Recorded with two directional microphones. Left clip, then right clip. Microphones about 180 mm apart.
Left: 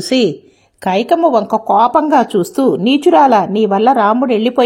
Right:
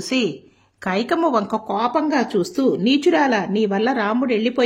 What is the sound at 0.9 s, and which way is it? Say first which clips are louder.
Speech: left 8 dB; 10° left (ahead or behind).